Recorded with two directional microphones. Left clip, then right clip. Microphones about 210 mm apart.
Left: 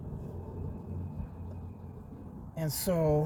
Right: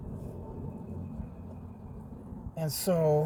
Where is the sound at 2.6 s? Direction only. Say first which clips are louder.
Right 2 dB; 10° right (ahead or behind).